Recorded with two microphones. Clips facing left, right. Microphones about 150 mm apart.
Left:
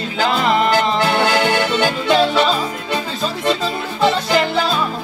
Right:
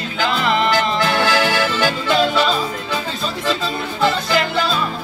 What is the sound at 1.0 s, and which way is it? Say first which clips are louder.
Music: left 1 dB; 25° left (ahead or behind).